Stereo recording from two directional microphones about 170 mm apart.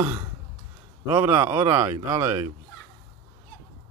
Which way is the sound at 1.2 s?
15° right (ahead or behind).